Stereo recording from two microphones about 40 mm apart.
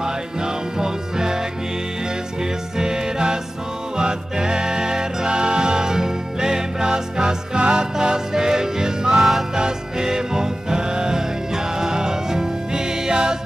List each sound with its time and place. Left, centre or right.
0.0 s music: centre
2.8 s music: centre